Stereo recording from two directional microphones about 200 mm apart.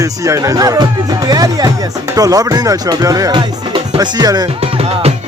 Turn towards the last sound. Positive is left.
turn(degrees=-20)  # may be behind; listen again after turning